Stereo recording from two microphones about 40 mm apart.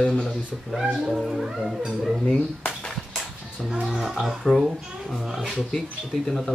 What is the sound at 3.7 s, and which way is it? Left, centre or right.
Speech, centre.